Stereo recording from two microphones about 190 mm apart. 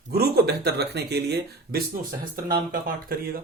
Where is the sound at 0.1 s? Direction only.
55° right (ahead or behind).